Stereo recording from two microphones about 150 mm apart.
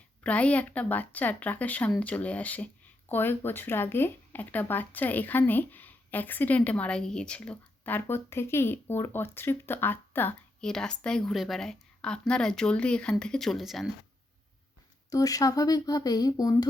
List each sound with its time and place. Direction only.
0.2 s speech: 10° left (ahead or behind)
15.1 s speech: 25° left (ahead or behind)